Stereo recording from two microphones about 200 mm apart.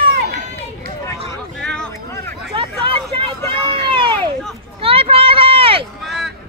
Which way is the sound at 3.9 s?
25° right (ahead or behind).